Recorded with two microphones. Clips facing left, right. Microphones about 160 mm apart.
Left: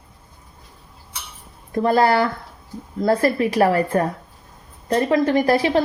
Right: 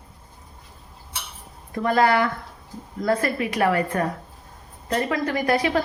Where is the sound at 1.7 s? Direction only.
35° left (ahead or behind).